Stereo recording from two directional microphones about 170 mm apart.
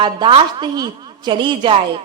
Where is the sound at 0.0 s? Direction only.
30° right (ahead or behind).